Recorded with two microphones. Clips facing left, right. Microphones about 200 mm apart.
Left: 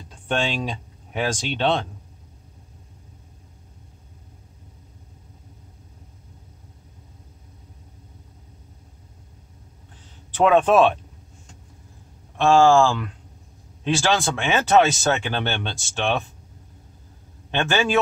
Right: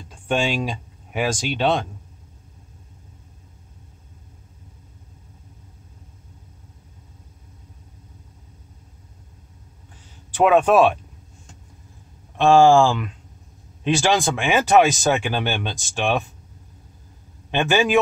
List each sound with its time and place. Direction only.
0.3 s speech: 10° right (ahead or behind)
10.3 s speech: 10° right (ahead or behind)
12.4 s speech: 15° right (ahead or behind)
17.5 s speech: 15° right (ahead or behind)